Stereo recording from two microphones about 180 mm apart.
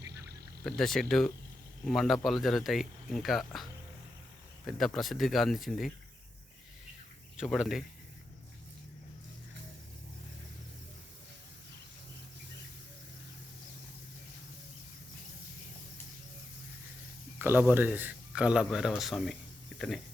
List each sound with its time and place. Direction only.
0.8 s a man's voice: centre (ahead or behind)
7.3 s a man's voice: centre (ahead or behind)
17.3 s a man's voice: 10° right (ahead or behind)